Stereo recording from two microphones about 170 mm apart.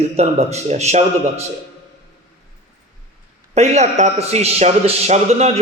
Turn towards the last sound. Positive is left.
turn(degrees=-40)  # may be behind; listen again after turning